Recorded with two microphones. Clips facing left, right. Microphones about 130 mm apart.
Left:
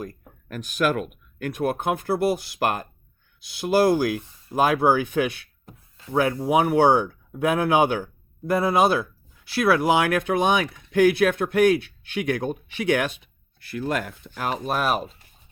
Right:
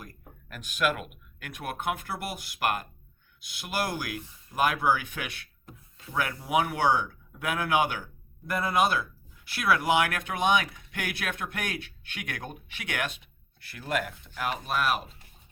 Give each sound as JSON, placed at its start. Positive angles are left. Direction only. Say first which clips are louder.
{"t": 0.5, "sound": "speech", "louder": "left 6 dB", "side_deg": 40}